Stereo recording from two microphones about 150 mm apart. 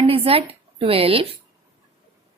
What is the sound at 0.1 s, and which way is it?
Speech, 40° right (ahead or behind).